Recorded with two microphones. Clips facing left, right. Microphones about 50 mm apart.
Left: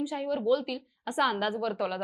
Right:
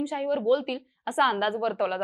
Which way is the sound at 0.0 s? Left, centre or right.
Centre.